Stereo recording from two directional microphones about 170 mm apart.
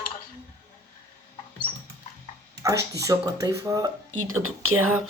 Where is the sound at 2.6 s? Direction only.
20° right (ahead or behind).